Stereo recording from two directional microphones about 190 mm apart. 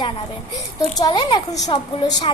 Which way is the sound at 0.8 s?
20° left (ahead or behind).